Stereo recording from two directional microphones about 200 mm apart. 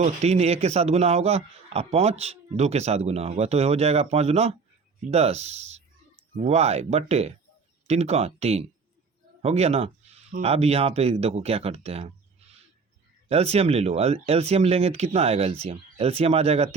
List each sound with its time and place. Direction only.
0.0 s a man's voice: 35° right (ahead or behind)
13.2 s a man's voice: 30° right (ahead or behind)